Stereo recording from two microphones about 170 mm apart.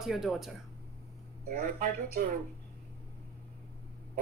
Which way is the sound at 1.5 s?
55° right (ahead or behind).